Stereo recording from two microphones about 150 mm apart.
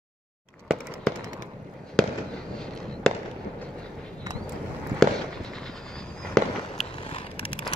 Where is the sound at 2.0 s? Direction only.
5° left (ahead or behind).